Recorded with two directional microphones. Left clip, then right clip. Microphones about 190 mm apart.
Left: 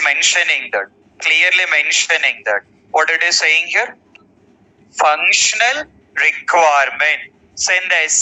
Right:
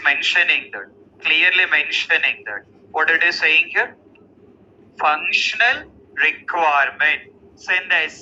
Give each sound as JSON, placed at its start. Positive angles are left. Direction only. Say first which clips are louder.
{"t": 0.0, "sound": "a man's voice", "louder": "left 3 dB", "side_deg": 55}
{"t": 4.9, "sound": "a man's voice", "louder": "left 5 dB", "side_deg": 55}